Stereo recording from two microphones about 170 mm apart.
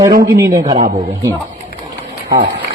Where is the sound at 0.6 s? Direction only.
40° right (ahead or behind).